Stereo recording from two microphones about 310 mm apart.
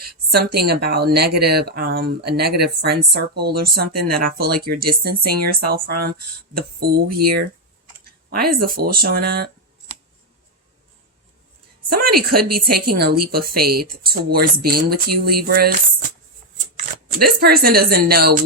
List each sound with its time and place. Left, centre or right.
0.0 s a sound: right
0.7 s speech: right
11.9 s speech: right